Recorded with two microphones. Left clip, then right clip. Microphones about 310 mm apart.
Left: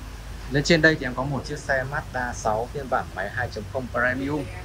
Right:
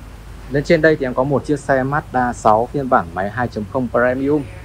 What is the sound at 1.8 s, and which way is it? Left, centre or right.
Speech, right.